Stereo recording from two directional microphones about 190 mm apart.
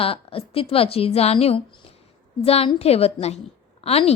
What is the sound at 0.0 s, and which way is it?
A woman's voice, 30° left (ahead or behind).